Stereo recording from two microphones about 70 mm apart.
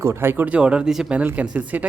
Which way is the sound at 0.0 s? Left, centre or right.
Right.